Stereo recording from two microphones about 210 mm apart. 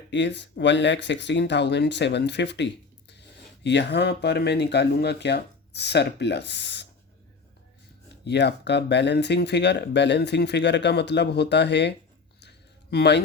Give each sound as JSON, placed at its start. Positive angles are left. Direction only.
{"t": 0.1, "sound": "speech", "side_deg": 55}
{"t": 8.2, "sound": "speech", "side_deg": 55}
{"t": 12.4, "sound": "a sound", "side_deg": 50}